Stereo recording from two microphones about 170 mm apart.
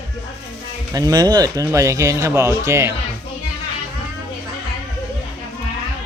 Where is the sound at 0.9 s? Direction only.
20° right (ahead or behind).